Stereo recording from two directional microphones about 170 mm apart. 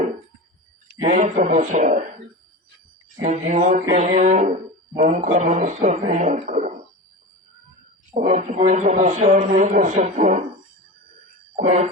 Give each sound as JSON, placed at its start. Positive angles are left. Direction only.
{"t": 1.0, "sound": "a man's voice", "side_deg": -45}
{"t": 3.2, "sound": "a man's voice", "side_deg": -45}
{"t": 8.1, "sound": "a man's voice", "side_deg": -45}
{"t": 11.5, "sound": "a man's voice", "side_deg": -45}